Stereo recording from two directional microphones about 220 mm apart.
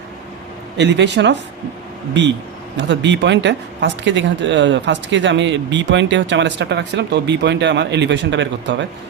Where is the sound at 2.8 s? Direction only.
50° right (ahead or behind).